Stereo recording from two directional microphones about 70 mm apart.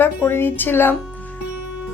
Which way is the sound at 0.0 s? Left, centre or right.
Left.